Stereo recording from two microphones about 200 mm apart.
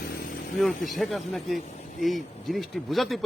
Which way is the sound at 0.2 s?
55° left (ahead or behind).